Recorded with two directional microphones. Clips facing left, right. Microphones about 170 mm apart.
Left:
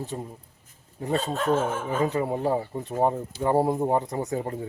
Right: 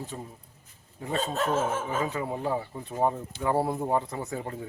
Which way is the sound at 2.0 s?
35° left (ahead or behind).